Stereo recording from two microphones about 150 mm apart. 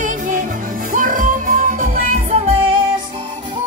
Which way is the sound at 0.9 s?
60° right (ahead or behind).